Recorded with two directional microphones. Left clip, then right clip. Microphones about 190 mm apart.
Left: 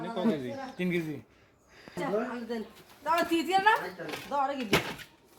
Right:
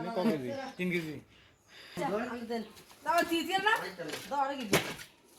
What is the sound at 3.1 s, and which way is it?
Speech, 35° right (ahead or behind).